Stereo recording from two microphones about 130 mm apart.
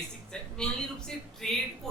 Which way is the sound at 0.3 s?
5° left (ahead or behind).